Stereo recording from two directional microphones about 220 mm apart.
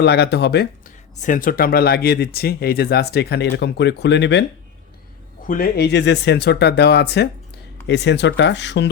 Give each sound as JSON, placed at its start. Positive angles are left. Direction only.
{"t": 0.0, "sound": "speech", "side_deg": 50}
{"t": 5.5, "sound": "speech", "side_deg": 40}